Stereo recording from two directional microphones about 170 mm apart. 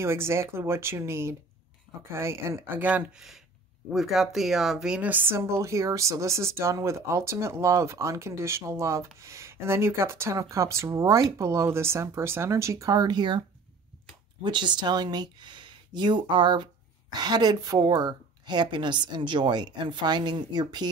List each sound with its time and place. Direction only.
0.0 s speech: 15° right (ahead or behind)
14.4 s a woman's voice: 25° right (ahead or behind)